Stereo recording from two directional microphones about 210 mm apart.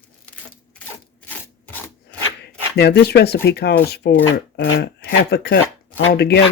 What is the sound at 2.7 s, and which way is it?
Speech, 50° left (ahead or behind).